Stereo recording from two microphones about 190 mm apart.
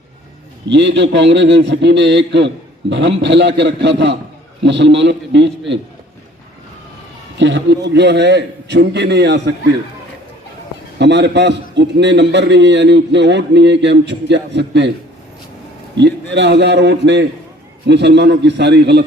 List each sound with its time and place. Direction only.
0.7 s a man's voice: 70° right (ahead or behind)
7.3 s a man's voice: 70° right (ahead or behind)
10.9 s a man's voice: 65° right (ahead or behind)
16.0 s a man's voice: 65° right (ahead or behind)